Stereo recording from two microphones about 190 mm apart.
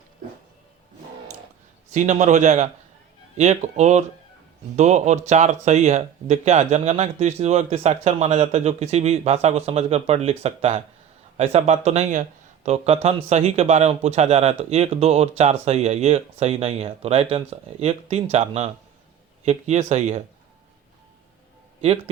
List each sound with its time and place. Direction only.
1.9 s speech: 40° right (ahead or behind)
21.8 s speech: 35° right (ahead or behind)